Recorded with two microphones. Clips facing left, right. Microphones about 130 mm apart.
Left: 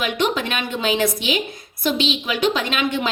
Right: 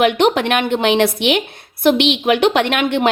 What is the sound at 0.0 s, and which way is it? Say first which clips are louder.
A woman's voice: right 8 dB; 60° right (ahead or behind).